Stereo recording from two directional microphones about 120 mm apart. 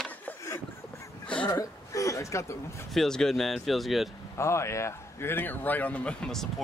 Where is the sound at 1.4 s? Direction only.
25° left (ahead or behind).